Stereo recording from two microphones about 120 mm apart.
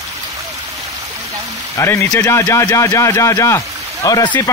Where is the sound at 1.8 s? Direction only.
25° left (ahead or behind).